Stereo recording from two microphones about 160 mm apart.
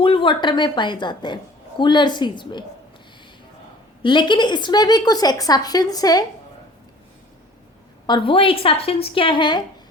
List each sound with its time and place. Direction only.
0.0 s a woman's voice: 30° left (ahead or behind)
4.0 s a woman's voice: 30° left (ahead or behind)
8.0 s a woman's voice: 30° left (ahead or behind)